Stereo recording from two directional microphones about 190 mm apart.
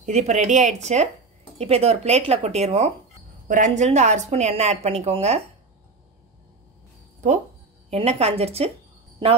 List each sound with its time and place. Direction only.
0.0 s speech: 35° right (ahead or behind)
7.9 s speech: 35° right (ahead or behind)